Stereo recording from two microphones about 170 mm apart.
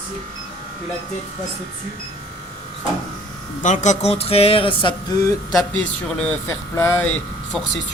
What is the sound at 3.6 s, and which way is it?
Speech, 45° left (ahead or behind).